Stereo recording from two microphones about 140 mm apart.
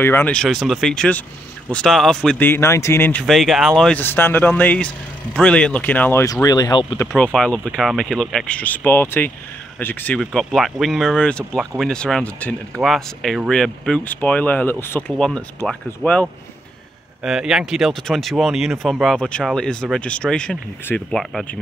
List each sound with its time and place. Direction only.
0.0 s speech: 15° left (ahead or behind)
2.3 s speech: 15° left (ahead or behind)
3.3 s speech: centre (ahead or behind)
4.0 s speech: 15° left (ahead or behind)
6.2 s speech: 25° left (ahead or behind)
7.3 s speech: 5° left (ahead or behind)
17.2 s speech: 5° right (ahead or behind)